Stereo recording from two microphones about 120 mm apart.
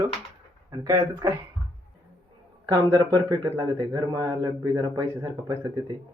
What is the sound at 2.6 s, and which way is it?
Speech, 30° right (ahead or behind).